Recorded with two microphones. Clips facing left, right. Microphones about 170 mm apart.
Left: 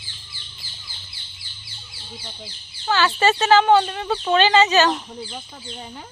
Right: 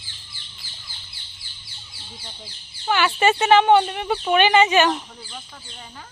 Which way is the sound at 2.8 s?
15° right (ahead or behind).